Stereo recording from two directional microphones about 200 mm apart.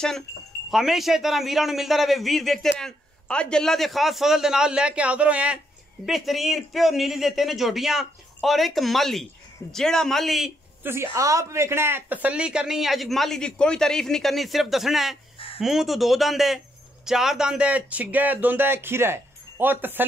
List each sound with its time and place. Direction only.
0.7 s speech: centre (ahead or behind)
10.9 s speech: 15° right (ahead or behind)
15.3 s a sound: 25° left (ahead or behind)
15.6 s speech: centre (ahead or behind)